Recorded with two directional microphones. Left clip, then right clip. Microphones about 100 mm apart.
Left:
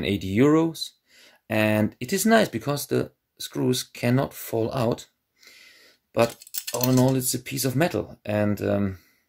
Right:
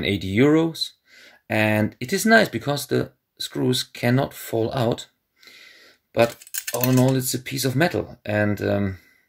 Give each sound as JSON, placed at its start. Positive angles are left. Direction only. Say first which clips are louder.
{"t": 0.0, "sound": "speech", "louder": "right 2 dB", "side_deg": 20}